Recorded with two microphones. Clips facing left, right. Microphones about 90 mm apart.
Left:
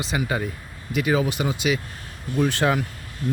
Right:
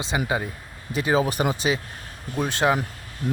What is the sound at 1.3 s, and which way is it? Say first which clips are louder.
Speech: right 1 dB; 40° right (ahead or behind).